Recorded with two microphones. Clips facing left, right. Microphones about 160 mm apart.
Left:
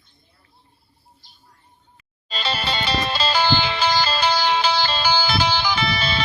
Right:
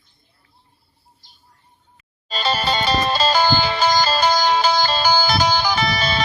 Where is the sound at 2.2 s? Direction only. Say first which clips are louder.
Right 5 dB; 45° right (ahead or behind).